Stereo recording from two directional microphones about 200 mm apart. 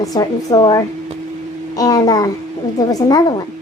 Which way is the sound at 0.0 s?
20° left (ahead or behind).